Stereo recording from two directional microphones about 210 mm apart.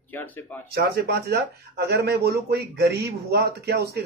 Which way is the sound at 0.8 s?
50° right (ahead or behind).